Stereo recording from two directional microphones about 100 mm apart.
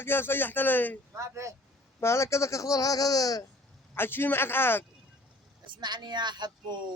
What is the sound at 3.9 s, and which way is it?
Speech, 20° left (ahead or behind).